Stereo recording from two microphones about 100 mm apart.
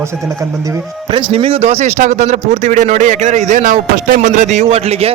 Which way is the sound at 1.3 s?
80° right.